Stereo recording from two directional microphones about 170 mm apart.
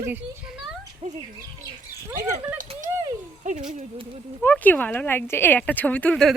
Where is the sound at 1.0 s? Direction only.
40° right (ahead or behind).